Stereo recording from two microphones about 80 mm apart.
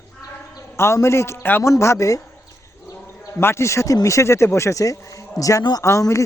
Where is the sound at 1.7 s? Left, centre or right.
Left.